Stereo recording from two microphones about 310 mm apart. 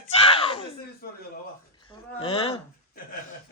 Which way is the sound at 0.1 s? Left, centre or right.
Centre.